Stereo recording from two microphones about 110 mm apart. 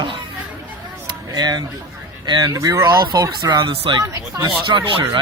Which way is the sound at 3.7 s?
55° right (ahead or behind).